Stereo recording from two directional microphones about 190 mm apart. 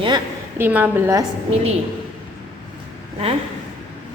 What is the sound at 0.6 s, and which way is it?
Speech, 10° right (ahead or behind).